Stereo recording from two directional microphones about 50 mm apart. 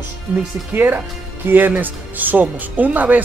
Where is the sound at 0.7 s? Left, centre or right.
Right.